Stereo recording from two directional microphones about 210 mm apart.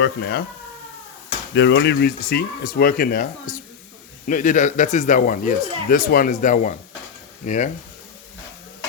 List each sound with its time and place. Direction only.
0.0 s speech: 50° left (ahead or behind)
1.5 s speech: 55° left (ahead or behind); by 7.7 s 35° left (ahead or behind)